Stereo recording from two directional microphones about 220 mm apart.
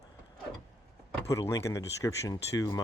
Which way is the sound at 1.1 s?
15° left (ahead or behind).